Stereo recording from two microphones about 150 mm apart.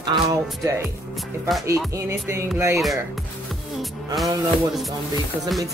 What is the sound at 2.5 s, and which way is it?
Speech, 20° right (ahead or behind).